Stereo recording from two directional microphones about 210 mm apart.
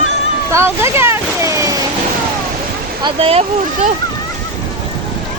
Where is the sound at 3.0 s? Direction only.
25° right (ahead or behind).